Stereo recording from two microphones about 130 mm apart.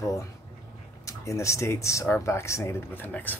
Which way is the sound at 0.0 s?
25° left (ahead or behind).